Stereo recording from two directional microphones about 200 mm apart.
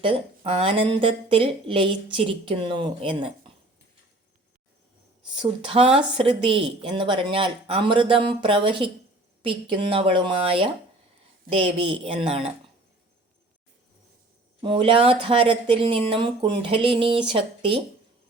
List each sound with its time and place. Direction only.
0.0 s speech: 30° right (ahead or behind)
5.4 s speech: 30° right (ahead or behind)
14.6 s speech: 25° right (ahead or behind)